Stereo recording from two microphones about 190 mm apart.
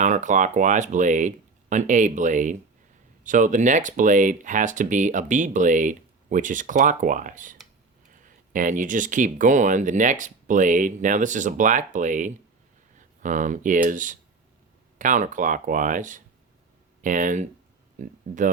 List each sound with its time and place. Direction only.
0.0 s speech: 40° right (ahead or behind)